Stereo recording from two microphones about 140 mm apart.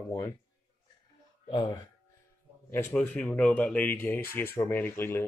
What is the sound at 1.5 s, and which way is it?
Speech, 30° left (ahead or behind).